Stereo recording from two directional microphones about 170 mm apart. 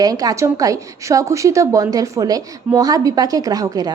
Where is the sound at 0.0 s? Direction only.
20° right (ahead or behind).